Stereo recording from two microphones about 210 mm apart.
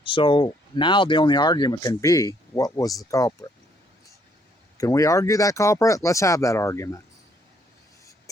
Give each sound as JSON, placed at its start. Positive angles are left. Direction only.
{"t": 0.0, "sound": "speech", "side_deg": 25}
{"t": 4.8, "sound": "speech", "side_deg": 15}